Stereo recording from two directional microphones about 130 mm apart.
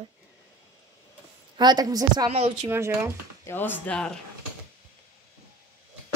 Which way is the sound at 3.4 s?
15° left (ahead or behind).